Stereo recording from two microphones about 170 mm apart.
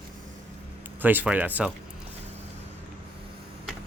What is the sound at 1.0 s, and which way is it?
Speech, 10° right (ahead or behind).